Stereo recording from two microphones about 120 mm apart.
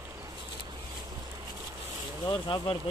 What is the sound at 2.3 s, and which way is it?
Speech, 40° left (ahead or behind).